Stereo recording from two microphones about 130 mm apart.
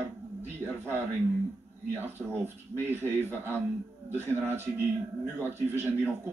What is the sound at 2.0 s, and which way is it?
Speech, 15° right (ahead or behind).